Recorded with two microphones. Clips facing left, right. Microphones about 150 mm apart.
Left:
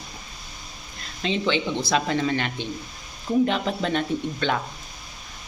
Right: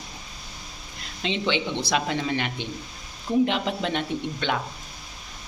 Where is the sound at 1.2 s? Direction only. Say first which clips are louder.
Left 2 dB; 20° right (ahead or behind).